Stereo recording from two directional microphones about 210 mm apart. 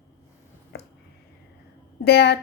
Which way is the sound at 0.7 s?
50° left (ahead or behind).